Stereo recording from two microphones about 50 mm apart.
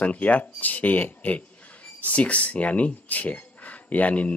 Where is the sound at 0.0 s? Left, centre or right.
Left.